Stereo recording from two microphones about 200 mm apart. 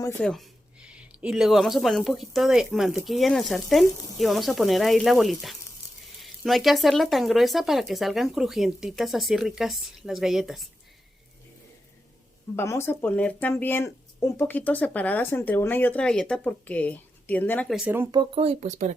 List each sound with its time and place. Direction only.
0.0 s speech: 10° left (ahead or behind)
12.5 s speech: 10° left (ahead or behind); by 18.2 s 10° right (ahead or behind)
18.2 s speech: 30° right (ahead or behind)